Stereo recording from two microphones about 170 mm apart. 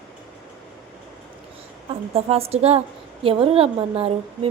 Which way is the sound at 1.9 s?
35° right (ahead or behind).